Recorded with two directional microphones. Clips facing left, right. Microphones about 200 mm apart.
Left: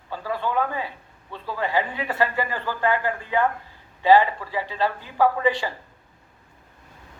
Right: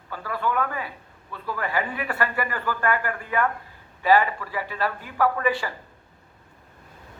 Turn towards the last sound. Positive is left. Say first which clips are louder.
# left 2 dB
turn(degrees=25)  # may be behind; listen again after turning